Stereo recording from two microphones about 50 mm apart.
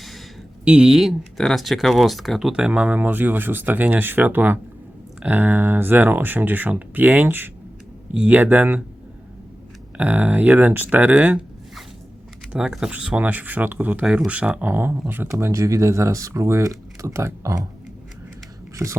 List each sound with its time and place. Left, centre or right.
0.6 s speech: right
0.9 s speech: centre
2.4 s speech: centre; by 8.8 s right
10.0 s speech: right
12.5 s speech: centre
12.9 s speech: right
13.1 s speech: right
14.6 s speech: right
15.3 s speech: right
18.8 s speech: right